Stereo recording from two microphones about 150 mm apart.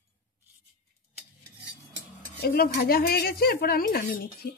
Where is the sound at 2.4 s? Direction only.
90° left.